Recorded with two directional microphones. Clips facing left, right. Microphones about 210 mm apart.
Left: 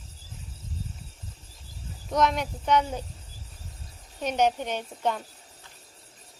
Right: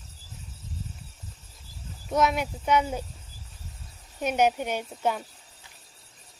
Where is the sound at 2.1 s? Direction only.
5° right (ahead or behind).